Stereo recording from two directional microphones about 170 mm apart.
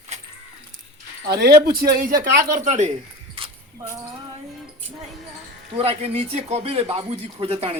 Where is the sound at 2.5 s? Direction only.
45° right (ahead or behind).